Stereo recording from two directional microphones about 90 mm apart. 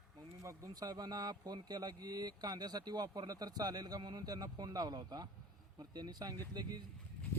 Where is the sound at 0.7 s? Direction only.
50° right (ahead or behind).